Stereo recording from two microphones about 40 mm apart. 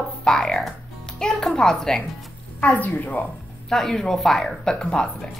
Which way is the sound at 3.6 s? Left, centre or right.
Centre.